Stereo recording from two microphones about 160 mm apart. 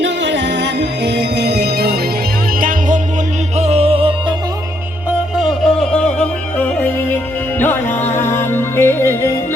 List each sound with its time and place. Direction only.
0.0 s music: 90° right
2.6 s music: 60° right (ahead or behind)
3.6 s music: 40° right (ahead or behind)
5.4 s music: centre (ahead or behind)